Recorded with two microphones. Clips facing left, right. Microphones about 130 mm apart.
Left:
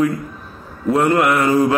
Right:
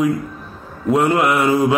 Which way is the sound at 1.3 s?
10° right (ahead or behind).